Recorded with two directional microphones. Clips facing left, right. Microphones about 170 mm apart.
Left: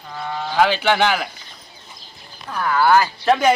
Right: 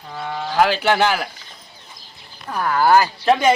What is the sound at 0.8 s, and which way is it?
Speech, 5° right (ahead or behind).